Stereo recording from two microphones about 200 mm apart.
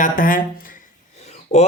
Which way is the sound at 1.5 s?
30° left (ahead or behind).